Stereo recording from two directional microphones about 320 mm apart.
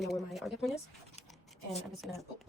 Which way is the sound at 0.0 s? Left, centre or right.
Centre.